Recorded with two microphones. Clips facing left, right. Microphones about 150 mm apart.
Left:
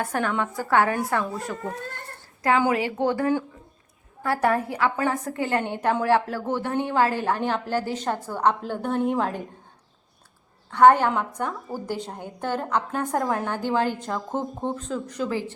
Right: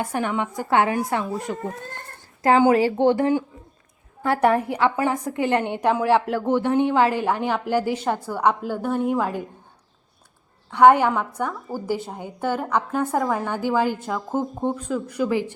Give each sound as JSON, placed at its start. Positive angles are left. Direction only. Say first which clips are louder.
{"t": 0.0, "sound": "a woman's voice", "louder": "right 1 dB", "side_deg": -15}
{"t": 10.7, "sound": "a woman's voice", "louder": "right 2 dB", "side_deg": -15}